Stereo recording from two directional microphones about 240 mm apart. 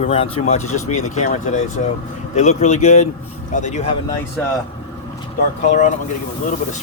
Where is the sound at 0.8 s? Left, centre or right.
Left.